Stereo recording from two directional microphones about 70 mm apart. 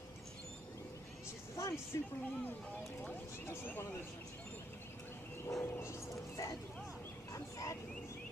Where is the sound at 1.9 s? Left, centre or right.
Left.